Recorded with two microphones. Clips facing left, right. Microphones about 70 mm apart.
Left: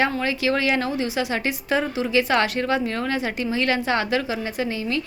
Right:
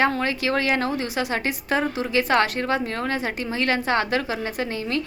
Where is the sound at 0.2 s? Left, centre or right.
Right.